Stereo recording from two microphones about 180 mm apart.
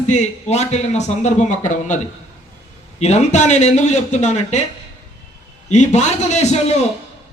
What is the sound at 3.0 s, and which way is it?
A man's voice, 40° left (ahead or behind).